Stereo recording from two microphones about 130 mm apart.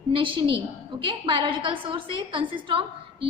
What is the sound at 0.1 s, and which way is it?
A woman's voice, 40° right (ahead or behind).